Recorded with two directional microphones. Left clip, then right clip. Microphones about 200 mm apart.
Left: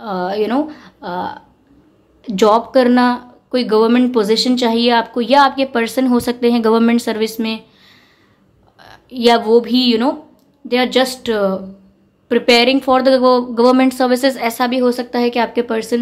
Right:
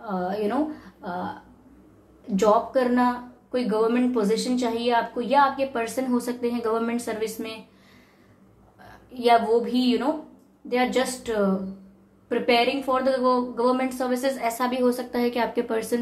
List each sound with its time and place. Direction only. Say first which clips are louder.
0.0 s a woman's voice: left 9 dB; 50° left (ahead or behind)
2.3 s a woman's voice: left 9 dB; 50° left (ahead or behind)
8.7 s a woman's voice: left 11 dB; 45° left (ahead or behind); by 16.0 s 30° left (ahead or behind)